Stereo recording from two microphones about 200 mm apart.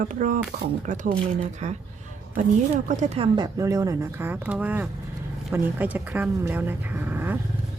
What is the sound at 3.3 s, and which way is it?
Speech, 20° right (ahead or behind).